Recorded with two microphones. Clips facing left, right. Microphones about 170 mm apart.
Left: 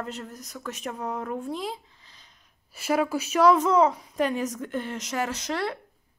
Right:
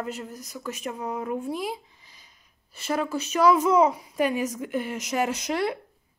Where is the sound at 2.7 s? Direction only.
5° left (ahead or behind); by 5.8 s 15° right (ahead or behind).